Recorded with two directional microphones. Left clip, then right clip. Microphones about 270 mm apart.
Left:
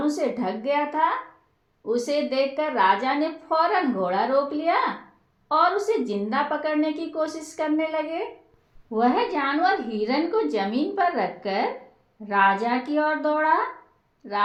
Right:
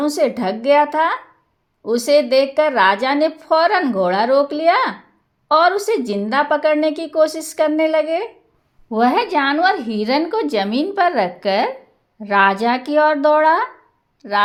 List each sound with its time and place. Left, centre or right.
0.0 s a woman's voice: right